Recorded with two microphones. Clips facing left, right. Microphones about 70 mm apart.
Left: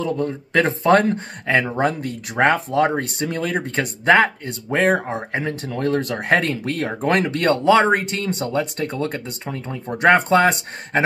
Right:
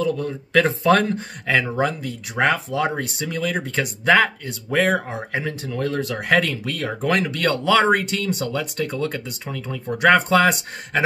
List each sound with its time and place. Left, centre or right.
0.0 s speech: left